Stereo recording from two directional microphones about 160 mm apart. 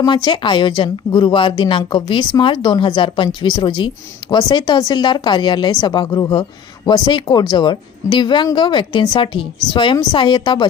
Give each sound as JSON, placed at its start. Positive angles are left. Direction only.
{"t": 0.0, "sound": "speech", "side_deg": 30}